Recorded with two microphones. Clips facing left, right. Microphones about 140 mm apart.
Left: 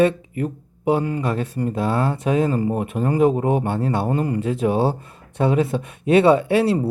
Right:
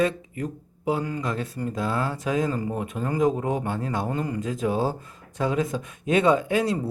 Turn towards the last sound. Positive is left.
turn(degrees=30)  # may be behind; listen again after turning